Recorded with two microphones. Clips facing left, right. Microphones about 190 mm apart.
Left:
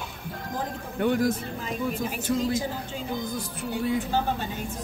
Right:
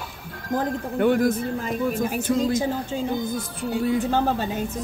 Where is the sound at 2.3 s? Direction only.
60° right (ahead or behind).